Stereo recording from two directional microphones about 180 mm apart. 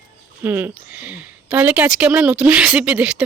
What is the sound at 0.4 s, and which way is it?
A woman's voice, 10° right (ahead or behind).